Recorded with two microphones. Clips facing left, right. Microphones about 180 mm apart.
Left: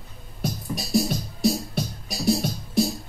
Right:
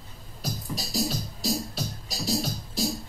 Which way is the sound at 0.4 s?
60° left (ahead or behind).